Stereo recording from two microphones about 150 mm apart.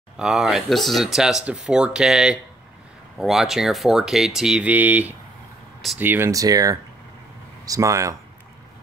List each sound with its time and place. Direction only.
0.2 s speech: centre (ahead or behind); by 8.2 s 20° right (ahead or behind)